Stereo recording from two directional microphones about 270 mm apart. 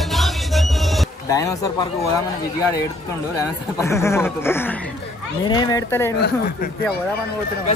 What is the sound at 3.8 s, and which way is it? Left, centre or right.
Speech, centre.